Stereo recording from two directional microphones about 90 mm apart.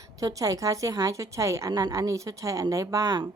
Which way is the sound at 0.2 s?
40° right (ahead or behind).